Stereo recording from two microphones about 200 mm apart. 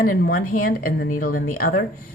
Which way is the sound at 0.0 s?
45° left (ahead or behind).